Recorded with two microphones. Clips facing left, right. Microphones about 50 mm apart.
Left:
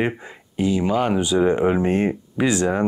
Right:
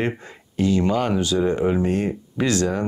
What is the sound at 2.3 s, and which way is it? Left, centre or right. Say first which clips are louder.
Speech: even; centre.